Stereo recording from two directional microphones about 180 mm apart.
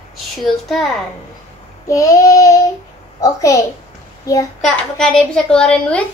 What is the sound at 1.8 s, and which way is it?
Child singing, 20° left (ahead or behind).